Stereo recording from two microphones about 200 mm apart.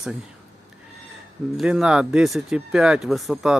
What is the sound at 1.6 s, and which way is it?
Speech, 5° right (ahead or behind).